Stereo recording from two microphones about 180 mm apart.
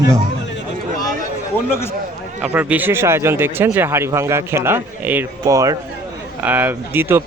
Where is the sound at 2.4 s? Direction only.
10° right (ahead or behind).